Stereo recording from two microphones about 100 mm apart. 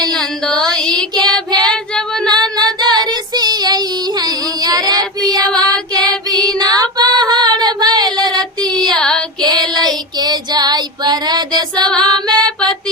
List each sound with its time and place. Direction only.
0.1 s music: 5° left (ahead or behind)
1.1 s child singing: 45° right (ahead or behind)
1.6 s female singing: 10° left (ahead or behind)
2.3 s female singing: 45° right (ahead or behind)
5.3 s music: 40° right (ahead or behind)
6.6 s female singing: 40° right (ahead or behind)
9.0 s female singing: 10° left (ahead or behind)
9.4 s child singing: 45° right (ahead or behind)
12.0 s female singing: 45° right (ahead or behind)